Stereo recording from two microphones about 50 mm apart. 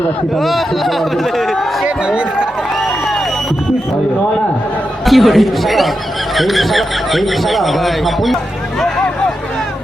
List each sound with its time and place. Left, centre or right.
0.3 s speech: centre
1.8 s speech: centre
5.0 s speech: centre